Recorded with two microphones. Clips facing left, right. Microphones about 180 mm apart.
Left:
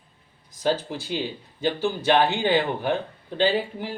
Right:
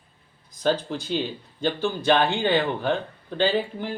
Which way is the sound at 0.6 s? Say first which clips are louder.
Right 1 dB; 10° left (ahead or behind).